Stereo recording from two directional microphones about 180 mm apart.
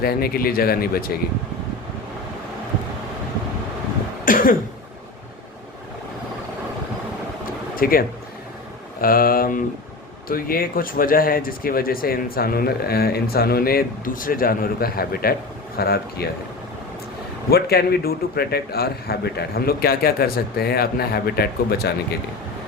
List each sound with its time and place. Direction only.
0.0 s speech: 55° left (ahead or behind)
4.3 s cough: 50° left (ahead or behind)
7.8 s speech: 55° left (ahead or behind)
9.0 s mantra: 55° left (ahead or behind)
10.2 s speech: 55° left (ahead or behind)
17.5 s speech: 60° left (ahead or behind)